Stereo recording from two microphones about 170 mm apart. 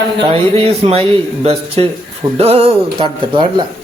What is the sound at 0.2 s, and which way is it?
Speech, 30° right (ahead or behind).